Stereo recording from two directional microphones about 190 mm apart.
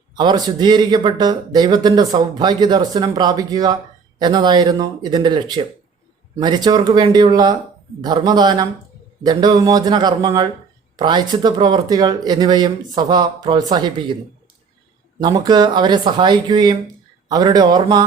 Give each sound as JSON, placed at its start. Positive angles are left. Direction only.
{"t": 0.2, "sound": "speech", "side_deg": -20}
{"t": 15.2, "sound": "speech", "side_deg": -20}